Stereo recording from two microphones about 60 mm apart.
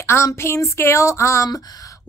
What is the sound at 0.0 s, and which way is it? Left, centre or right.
Speech, left.